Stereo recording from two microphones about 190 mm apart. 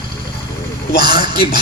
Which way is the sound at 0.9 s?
60° left (ahead or behind).